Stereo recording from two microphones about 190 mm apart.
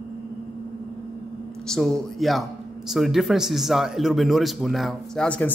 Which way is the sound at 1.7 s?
Centre (ahead or behind).